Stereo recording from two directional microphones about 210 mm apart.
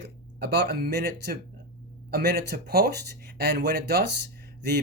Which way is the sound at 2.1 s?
50° right (ahead or behind).